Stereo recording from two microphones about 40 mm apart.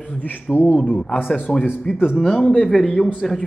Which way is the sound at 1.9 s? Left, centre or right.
Left.